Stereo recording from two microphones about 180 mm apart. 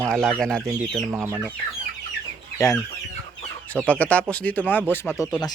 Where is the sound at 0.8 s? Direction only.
10° right (ahead or behind).